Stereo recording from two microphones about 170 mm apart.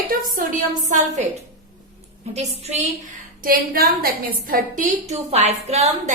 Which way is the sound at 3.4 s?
55° right (ahead or behind).